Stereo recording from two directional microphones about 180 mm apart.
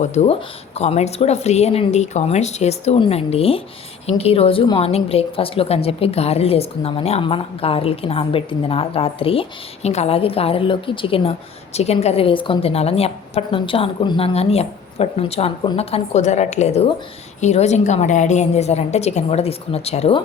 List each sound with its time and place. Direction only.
0.0 s a woman's voice: 40° left (ahead or behind)